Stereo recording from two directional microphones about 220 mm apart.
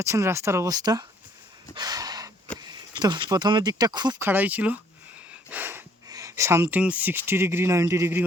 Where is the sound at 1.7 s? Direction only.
15° right (ahead or behind).